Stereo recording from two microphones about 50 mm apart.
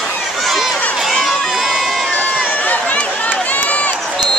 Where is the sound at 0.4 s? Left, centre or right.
Centre.